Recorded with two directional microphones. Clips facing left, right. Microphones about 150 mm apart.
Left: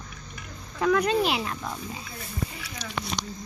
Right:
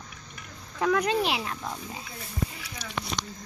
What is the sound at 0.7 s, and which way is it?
Speech, 5° right (ahead or behind).